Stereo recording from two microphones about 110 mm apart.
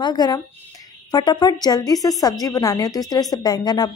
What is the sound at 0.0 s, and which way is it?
A woman's voice, 40° left (ahead or behind).